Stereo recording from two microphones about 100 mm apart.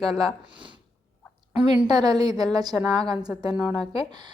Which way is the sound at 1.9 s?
45° right (ahead or behind).